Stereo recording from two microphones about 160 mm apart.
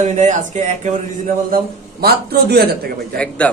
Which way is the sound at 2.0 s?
75° right (ahead or behind).